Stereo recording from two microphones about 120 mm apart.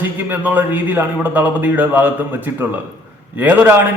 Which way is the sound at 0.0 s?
15° right (ahead or behind).